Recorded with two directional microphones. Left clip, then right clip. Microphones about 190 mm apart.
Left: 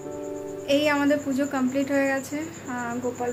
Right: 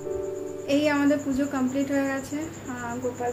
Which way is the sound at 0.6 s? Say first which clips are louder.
Left 1 dB; centre (ahead or behind).